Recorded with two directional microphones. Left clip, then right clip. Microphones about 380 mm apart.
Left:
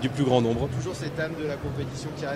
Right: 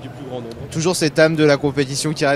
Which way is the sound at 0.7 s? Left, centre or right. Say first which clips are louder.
Right 14 dB; right.